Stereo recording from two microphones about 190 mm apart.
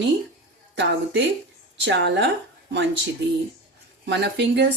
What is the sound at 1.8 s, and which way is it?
Speech, 70° right (ahead or behind).